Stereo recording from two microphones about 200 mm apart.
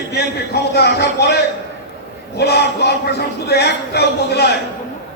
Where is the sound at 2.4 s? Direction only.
55° left (ahead or behind).